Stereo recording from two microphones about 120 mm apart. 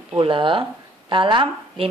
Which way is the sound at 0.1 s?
45° right (ahead or behind).